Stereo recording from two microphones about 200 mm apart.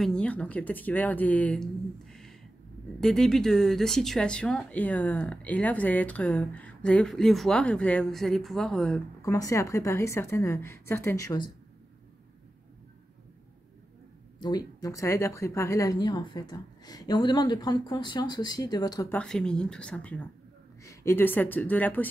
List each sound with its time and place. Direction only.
0.0 s speech: 5° left (ahead or behind)
9.2 s speech: 15° left (ahead or behind)
14.4 s speech: 20° left (ahead or behind)
19.1 s speech: 5° left (ahead or behind)